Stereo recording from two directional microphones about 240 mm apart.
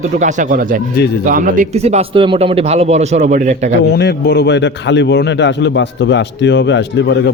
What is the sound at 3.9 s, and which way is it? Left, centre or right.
A man's voice, left.